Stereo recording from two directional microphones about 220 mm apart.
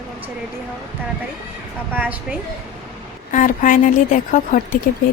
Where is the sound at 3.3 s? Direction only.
35° left (ahead or behind).